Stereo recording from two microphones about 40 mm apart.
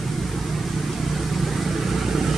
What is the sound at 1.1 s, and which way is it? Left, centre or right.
Vehicle, centre.